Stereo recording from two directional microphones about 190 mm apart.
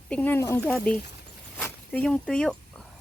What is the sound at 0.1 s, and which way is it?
Speech, 10° left (ahead or behind).